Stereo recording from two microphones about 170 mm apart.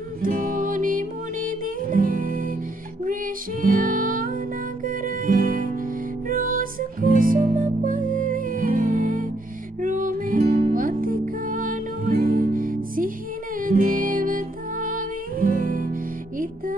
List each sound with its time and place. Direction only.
0.2 s music: 55° right (ahead or behind)
3.6 s music: 55° right (ahead or behind)